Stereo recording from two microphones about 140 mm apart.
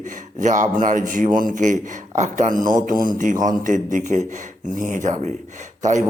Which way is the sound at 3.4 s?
65° right (ahead or behind).